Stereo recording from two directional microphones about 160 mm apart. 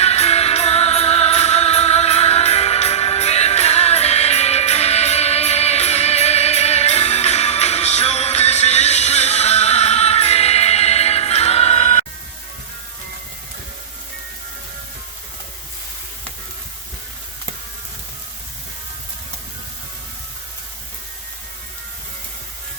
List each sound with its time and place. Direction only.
0.0 s music: 40° left (ahead or behind)